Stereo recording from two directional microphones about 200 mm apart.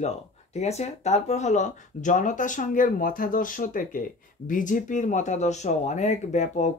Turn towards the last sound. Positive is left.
turn(degrees=35)  # may be behind; listen again after turning